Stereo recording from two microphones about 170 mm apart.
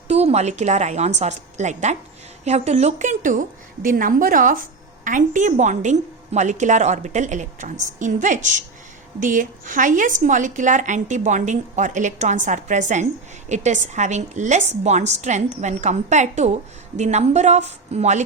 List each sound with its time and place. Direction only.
0.1 s a woman's voice: 40° right (ahead or behind)